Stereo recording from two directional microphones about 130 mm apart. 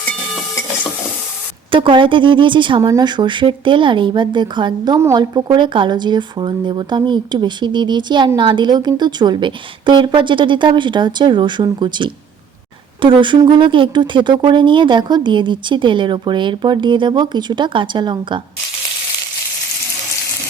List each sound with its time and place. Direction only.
1.7 s speech: 40° right (ahead or behind)